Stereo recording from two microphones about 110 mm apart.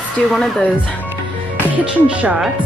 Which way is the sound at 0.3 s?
5° left (ahead or behind).